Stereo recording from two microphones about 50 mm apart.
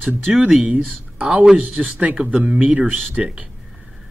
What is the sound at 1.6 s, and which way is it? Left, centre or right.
Speech, right.